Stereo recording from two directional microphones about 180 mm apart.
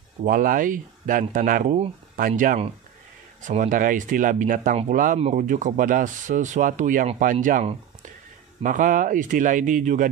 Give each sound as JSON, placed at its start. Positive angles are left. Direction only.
{"t": 0.2, "sound": "speech", "side_deg": -50}